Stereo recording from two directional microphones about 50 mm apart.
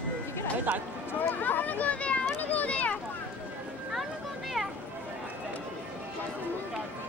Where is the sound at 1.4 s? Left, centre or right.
Left.